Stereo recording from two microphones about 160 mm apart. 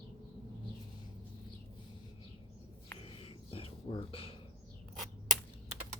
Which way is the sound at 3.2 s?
35° left (ahead or behind).